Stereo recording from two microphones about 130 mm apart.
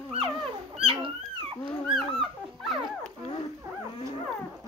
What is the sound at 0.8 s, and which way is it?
Dog, 45° right (ahead or behind).